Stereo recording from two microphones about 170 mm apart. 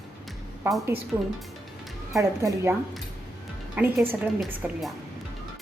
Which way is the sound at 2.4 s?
15° right (ahead or behind).